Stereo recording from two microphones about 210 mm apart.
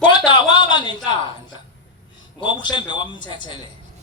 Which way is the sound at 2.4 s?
20° left (ahead or behind).